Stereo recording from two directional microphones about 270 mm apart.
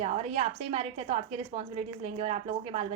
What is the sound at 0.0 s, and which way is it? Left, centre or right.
A woman's voice, right.